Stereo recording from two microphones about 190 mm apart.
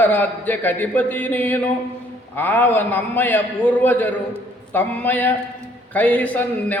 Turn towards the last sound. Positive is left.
turn(degrees=10)  # may be behind; listen again after turning